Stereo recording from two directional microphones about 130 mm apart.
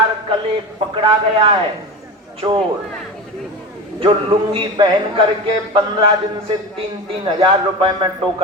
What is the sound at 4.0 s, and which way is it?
Speech, 40° right (ahead or behind).